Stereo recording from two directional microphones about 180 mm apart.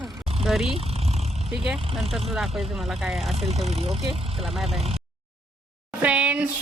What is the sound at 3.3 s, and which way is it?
Speech, 35° right (ahead or behind).